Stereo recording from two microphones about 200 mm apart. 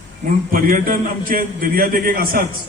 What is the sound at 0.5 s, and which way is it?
A man's voice, 45° right (ahead or behind).